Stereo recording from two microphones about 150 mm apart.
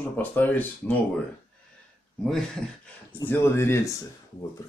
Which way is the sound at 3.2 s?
15° left (ahead or behind).